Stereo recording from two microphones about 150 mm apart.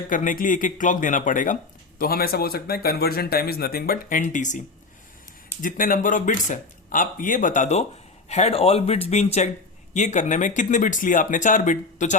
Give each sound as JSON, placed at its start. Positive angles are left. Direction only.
{"t": 0.1, "sound": "speech", "side_deg": 60}
{"t": 2.0, "sound": "speech", "side_deg": 80}
{"t": 4.2, "sound": "speech", "side_deg": 55}
{"t": 5.6, "sound": "speech", "side_deg": 65}